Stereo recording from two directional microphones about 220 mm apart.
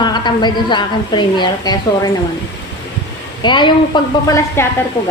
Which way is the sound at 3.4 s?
20° left (ahead or behind).